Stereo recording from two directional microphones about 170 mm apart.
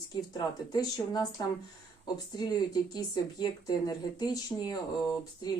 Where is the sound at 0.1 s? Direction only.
25° left (ahead or behind).